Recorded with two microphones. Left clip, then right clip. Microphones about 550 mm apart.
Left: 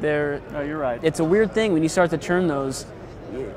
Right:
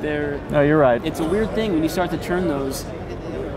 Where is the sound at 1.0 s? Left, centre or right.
Left.